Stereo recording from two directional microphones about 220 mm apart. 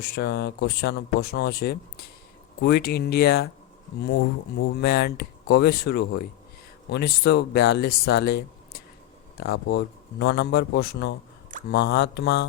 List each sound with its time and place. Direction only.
0.0 s speech: 45° left (ahead or behind)
4.7 s speech: 45° left (ahead or behind)